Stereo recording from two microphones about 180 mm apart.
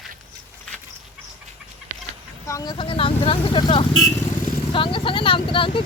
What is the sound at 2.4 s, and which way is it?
Speech, 20° left (ahead or behind).